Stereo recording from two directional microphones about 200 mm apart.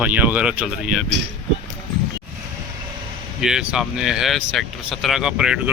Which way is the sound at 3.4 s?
5° right (ahead or behind).